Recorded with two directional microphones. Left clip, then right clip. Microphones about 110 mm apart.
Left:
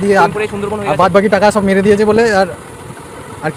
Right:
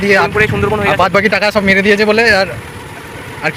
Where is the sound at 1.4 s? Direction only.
90° left.